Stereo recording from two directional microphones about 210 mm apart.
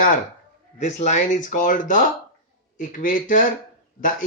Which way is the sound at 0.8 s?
35° left (ahead or behind).